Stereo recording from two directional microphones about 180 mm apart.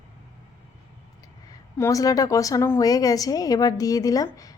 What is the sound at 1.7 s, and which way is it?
A woman's voice, 15° left (ahead or behind).